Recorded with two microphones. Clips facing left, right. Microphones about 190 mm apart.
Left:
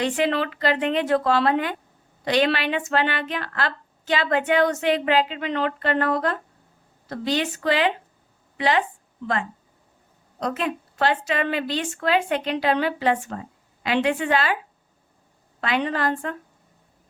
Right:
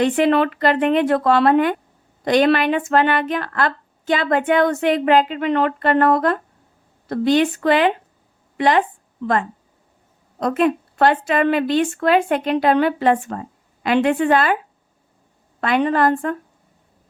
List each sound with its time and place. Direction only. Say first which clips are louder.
0.0 s a woman's voice: right 7 dB; 55° right (ahead or behind)
10.4 s speech: right 8 dB; 55° right (ahead or behind)
15.6 s speech: right 7 dB; 50° right (ahead or behind)